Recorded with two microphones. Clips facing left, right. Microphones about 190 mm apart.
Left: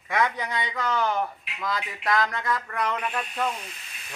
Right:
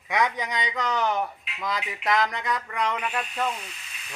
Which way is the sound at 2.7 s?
10° right (ahead or behind).